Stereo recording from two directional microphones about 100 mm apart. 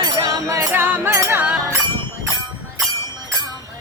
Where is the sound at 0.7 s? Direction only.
20° right (ahead or behind).